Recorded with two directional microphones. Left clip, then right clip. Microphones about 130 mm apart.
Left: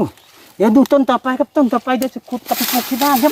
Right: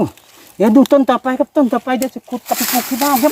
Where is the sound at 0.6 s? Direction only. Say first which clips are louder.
Right 2 dB; 45° right (ahead or behind).